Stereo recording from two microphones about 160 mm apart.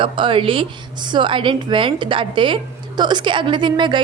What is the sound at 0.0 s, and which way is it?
A woman's voice, 30° right (ahead or behind).